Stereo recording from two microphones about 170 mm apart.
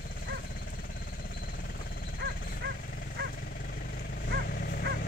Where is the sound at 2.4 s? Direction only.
65° left (ahead or behind).